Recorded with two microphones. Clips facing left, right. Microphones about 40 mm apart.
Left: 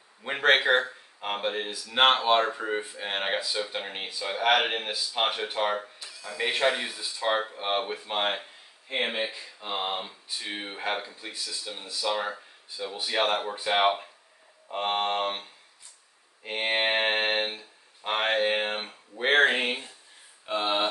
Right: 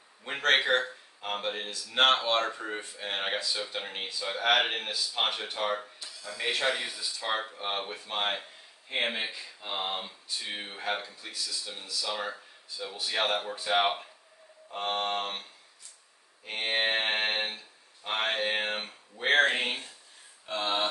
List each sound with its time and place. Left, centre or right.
0.2 s speech: centre
8.4 s a sound: centre
9.2 s speech: centre
16.4 s speech: left
17.6 s a sound: left
18.3 s speech: centre